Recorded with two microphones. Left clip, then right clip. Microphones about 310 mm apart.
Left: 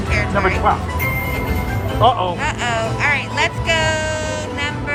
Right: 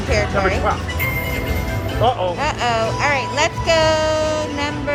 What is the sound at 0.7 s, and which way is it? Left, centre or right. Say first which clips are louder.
Speech: left 4 dB; centre.